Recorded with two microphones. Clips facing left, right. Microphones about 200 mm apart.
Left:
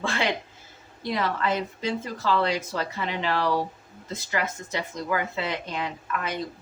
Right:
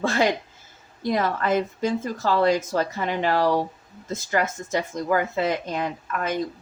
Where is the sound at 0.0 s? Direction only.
40° right (ahead or behind).